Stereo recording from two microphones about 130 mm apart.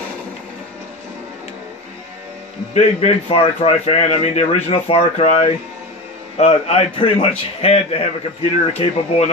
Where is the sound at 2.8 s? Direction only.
50° left (ahead or behind).